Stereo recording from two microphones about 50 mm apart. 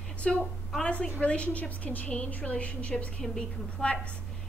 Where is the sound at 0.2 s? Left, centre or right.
Left.